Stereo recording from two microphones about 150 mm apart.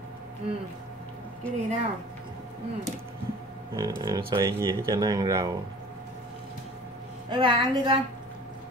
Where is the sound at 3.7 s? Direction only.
25° right (ahead or behind).